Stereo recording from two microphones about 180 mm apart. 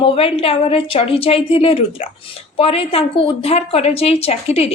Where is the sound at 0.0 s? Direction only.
30° left (ahead or behind).